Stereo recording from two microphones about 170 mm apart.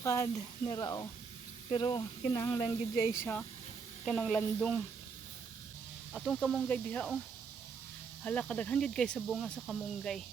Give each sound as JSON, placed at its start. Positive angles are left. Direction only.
{"t": 0.0, "sound": "speech", "side_deg": 20}
{"t": 4.0, "sound": "speech", "side_deg": 5}
{"t": 6.1, "sound": "speech", "side_deg": 0}
{"t": 8.2, "sound": "speech", "side_deg": 5}